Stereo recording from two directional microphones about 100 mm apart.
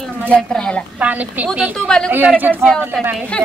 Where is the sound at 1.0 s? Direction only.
15° right (ahead or behind).